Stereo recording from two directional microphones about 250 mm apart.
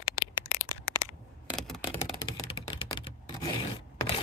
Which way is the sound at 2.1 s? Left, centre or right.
Centre.